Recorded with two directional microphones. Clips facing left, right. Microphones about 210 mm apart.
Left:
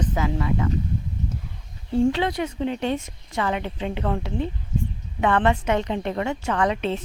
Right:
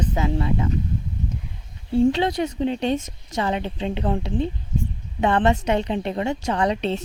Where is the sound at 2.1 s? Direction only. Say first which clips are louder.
Right 2 dB; 30° right (ahead or behind).